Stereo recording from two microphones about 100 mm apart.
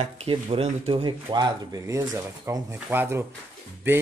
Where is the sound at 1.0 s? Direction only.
50° right (ahead or behind).